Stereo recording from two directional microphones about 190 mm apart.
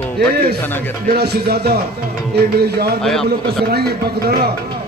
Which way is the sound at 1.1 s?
55° right (ahead or behind).